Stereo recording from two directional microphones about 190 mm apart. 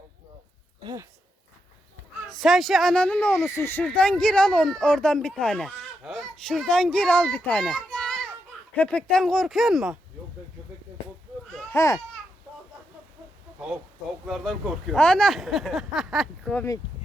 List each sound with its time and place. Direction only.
0.8 s speech: 20° right (ahead or behind)
2.3 s speech: centre (ahead or behind)
11.7 s speech: 15° left (ahead or behind)
14.3 s speech: centre (ahead or behind)